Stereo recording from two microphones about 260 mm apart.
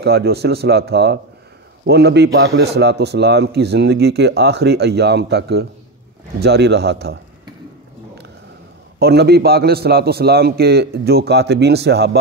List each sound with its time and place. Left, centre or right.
0.0 s a man's voice: right
9.0 s a man's voice: right